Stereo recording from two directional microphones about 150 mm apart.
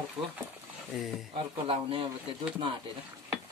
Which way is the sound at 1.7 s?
35° right (ahead or behind).